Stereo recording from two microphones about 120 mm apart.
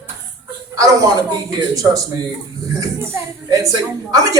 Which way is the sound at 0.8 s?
30° right (ahead or behind).